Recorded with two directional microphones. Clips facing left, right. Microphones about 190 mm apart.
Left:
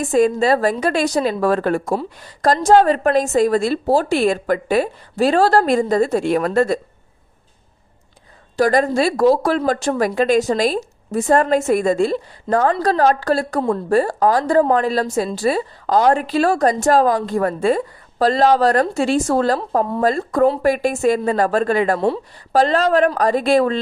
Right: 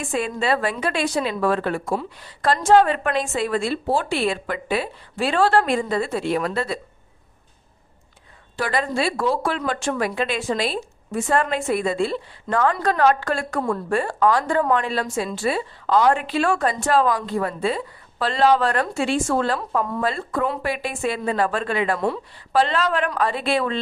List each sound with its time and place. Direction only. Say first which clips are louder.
0.0 s speech: left 9 dB; 40° left (ahead or behind)
8.5 s speech: left 8 dB; 40° left (ahead or behind)